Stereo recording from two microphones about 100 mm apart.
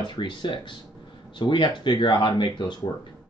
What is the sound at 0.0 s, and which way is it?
Speech, 50° left (ahead or behind).